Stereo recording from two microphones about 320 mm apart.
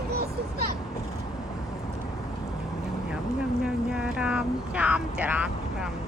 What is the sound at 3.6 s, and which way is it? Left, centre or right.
Speech, centre.